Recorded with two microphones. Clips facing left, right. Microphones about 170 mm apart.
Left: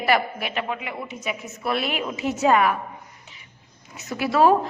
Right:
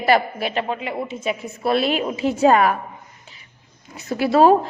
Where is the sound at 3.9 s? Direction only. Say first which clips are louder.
Right 5 dB; 30° right (ahead or behind).